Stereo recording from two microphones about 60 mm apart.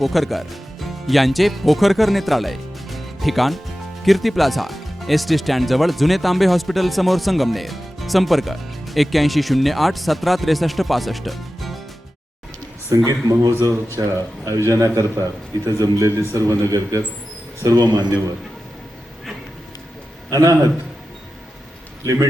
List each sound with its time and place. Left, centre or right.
0.0 s speech: centre
13.1 s speech: right
14.7 s a man's voice: right
17.6 s a man's voice: right
20.3 s speech: right
22.0 s a man's voice: right